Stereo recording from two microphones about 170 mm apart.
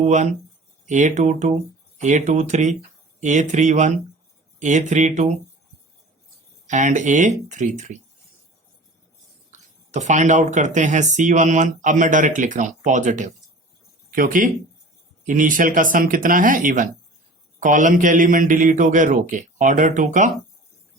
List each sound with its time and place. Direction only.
0.0 s speech: 45° right (ahead or behind)
6.7 s speech: 45° right (ahead or behind)
9.5 s speech: 45° right (ahead or behind)